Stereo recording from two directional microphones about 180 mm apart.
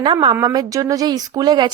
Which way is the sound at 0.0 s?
25° right (ahead or behind).